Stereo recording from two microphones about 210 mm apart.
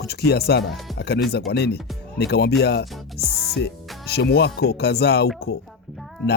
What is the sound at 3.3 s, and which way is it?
Music, centre (ahead or behind).